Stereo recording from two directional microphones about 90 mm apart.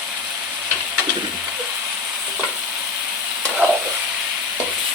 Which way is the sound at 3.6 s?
20° right (ahead or behind).